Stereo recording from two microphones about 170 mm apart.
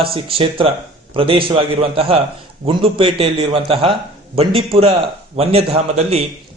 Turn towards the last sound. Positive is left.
turn(degrees=-35)  # may be behind; listen again after turning